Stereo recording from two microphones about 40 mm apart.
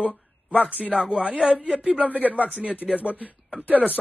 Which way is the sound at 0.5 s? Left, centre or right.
Right.